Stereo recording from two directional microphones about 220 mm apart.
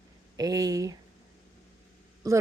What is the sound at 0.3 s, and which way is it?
Speech, 15° right (ahead or behind).